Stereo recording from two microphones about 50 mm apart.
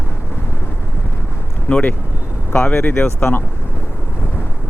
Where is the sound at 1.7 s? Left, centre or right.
Left.